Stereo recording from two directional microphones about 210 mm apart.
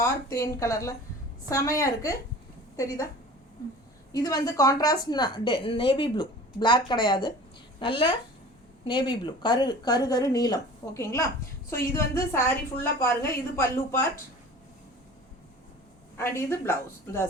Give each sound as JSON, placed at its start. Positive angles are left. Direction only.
{"t": 0.0, "sound": "speech", "side_deg": 15}
{"t": 4.1, "sound": "a woman's voice", "side_deg": 15}
{"t": 16.1, "sound": "speech", "side_deg": 10}